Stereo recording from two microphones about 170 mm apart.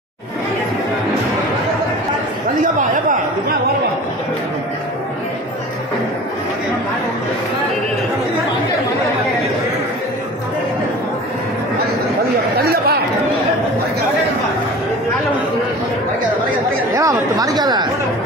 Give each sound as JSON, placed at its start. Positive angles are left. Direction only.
{"t": 12.5, "sound": "chatter", "side_deg": -65}
{"t": 16.9, "sound": "speech", "side_deg": -20}